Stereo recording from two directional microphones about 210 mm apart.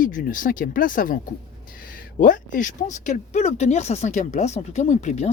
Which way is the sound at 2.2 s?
40° left (ahead or behind).